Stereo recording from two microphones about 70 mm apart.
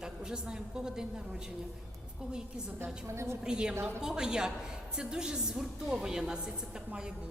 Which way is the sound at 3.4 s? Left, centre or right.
Centre.